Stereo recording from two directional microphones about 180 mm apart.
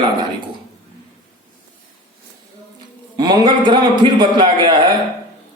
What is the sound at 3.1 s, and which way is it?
Speech, 20° right (ahead or behind).